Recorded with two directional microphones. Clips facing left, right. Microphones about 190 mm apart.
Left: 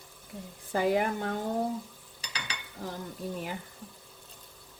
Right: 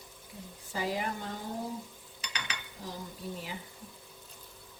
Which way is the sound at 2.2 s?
35° left (ahead or behind).